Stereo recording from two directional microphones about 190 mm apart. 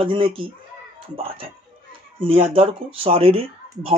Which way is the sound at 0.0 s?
30° right (ahead or behind).